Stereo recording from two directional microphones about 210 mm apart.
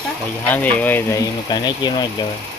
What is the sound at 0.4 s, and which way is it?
Speech, 10° left (ahead or behind).